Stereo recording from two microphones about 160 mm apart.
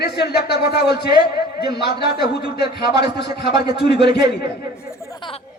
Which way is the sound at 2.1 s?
90° left.